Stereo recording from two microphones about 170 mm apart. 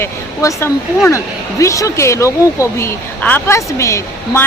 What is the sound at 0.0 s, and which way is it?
Speech, 15° left (ahead or behind).